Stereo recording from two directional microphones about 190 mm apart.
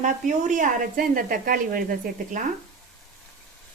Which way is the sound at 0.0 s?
40° right (ahead or behind).